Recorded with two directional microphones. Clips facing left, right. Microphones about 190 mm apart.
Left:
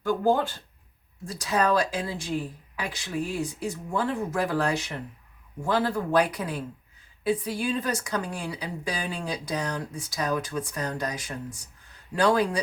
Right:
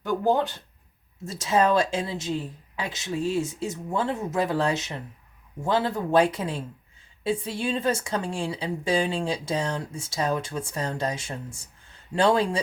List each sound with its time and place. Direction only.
0.0 s a woman's voice: 20° right (ahead or behind)